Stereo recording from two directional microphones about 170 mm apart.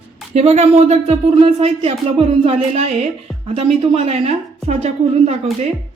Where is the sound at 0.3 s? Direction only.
40° right (ahead or behind).